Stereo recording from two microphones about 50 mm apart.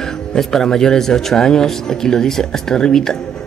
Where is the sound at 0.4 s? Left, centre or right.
Centre.